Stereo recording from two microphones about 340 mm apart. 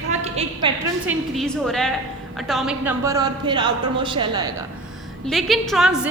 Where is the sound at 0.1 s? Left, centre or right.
Centre.